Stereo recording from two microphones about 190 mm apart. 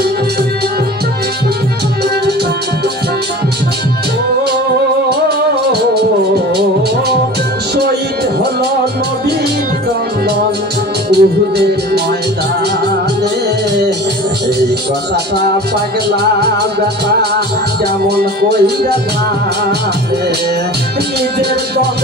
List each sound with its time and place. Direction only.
11.1 s music: 60° right (ahead or behind)
18.1 s music: 60° right (ahead or behind)
21.3 s music: 60° right (ahead or behind)